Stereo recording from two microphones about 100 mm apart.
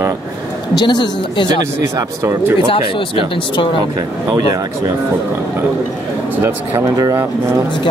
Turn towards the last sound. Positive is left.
turn(degrees=-35)  # may be behind; listen again after turning